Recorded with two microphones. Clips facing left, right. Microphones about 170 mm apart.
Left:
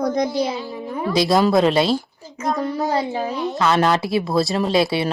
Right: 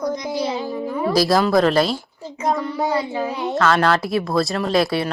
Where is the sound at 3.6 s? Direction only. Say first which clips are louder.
Even; 20° left (ahead or behind).